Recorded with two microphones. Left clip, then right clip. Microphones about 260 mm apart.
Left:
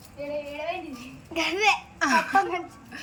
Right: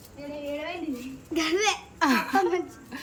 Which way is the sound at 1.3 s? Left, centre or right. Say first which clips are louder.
Left 2 dB; centre.